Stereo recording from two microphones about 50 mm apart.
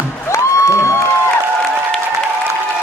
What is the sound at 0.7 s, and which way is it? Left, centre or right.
Music, left.